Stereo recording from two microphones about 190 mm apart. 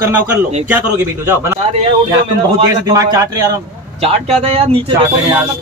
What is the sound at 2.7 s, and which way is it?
Speech, 20° right (ahead or behind).